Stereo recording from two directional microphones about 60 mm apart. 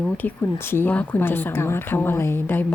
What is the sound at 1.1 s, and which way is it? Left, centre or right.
A woman's voice, left.